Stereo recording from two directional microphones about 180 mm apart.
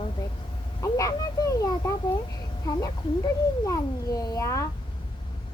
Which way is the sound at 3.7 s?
20° left (ahead or behind).